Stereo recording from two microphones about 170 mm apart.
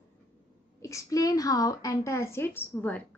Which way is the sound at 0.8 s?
20° left (ahead or behind).